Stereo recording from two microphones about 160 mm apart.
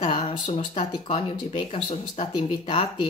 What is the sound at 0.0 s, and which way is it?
Speech, 35° left (ahead or behind).